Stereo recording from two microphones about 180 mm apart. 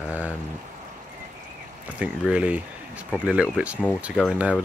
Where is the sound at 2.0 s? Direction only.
5° right (ahead or behind).